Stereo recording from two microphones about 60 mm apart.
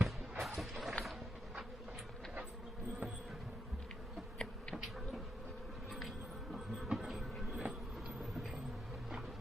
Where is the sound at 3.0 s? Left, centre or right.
Right.